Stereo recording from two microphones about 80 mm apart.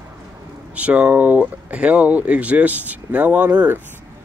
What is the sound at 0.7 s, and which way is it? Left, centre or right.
Speech, centre.